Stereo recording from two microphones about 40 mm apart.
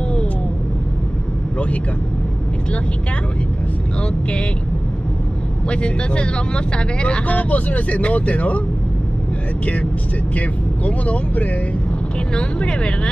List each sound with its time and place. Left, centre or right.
5.7 s speech: left
10.9 s speech: left